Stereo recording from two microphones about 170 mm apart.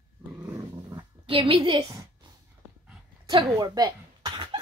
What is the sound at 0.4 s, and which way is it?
Dog, 20° right (ahead or behind).